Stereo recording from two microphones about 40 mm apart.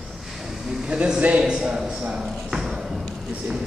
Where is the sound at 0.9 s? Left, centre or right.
Right.